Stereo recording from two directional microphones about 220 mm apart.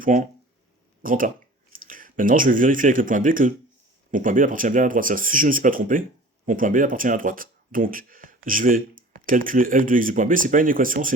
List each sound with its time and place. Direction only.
0.0 s speech: 35° right (ahead or behind)